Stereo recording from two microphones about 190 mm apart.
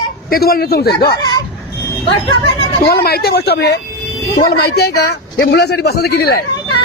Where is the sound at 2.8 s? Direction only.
55° left (ahead or behind).